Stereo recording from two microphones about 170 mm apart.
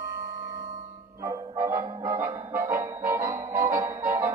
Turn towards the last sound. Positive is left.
turn(degrees=-15)  # may be behind; listen again after turning